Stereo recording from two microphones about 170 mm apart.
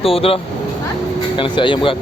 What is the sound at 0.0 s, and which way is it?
Speech, 35° left (ahead or behind).